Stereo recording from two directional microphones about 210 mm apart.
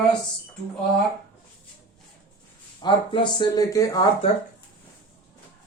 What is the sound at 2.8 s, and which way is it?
Speech, 25° left (ahead or behind).